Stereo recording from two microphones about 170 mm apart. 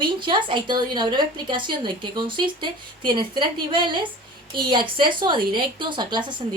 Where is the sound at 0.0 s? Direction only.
30° right (ahead or behind).